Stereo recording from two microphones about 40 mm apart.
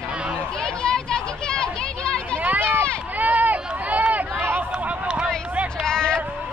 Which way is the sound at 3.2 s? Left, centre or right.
Right.